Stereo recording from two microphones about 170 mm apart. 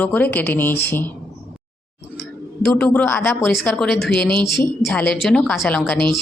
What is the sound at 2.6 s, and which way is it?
Speech, 5° left (ahead or behind).